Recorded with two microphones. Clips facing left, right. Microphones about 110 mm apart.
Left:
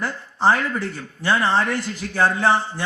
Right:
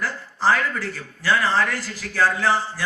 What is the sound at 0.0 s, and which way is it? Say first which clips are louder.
Speech: left 3 dB; 25° left (ahead or behind).